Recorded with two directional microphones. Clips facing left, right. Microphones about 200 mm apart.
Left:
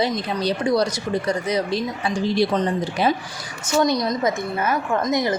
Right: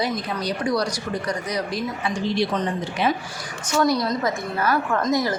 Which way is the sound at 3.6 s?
25° left (ahead or behind).